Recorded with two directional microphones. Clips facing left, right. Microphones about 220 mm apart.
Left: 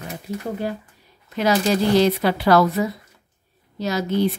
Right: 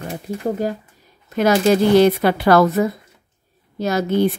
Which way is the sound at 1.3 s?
50° right (ahead or behind).